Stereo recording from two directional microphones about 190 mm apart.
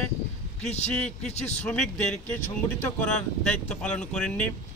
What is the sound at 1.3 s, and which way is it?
Speech, 35° left (ahead or behind).